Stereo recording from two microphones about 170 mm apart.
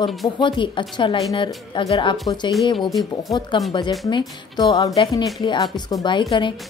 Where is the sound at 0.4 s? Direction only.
30° left (ahead or behind).